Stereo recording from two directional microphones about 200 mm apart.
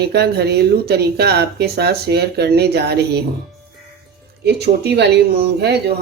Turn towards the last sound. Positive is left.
turn(degrees=-50)  # may be behind; listen again after turning